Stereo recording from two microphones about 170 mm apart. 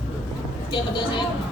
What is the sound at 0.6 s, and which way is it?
Speech, 30° left (ahead or behind).